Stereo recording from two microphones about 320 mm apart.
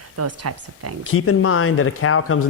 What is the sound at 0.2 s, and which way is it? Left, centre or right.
Speech, right.